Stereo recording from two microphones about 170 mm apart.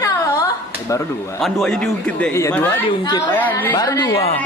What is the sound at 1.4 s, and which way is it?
A man's voice, centre (ahead or behind).